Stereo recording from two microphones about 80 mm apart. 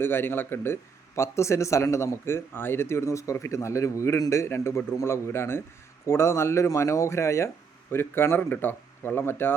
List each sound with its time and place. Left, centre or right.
0.0 s speech: left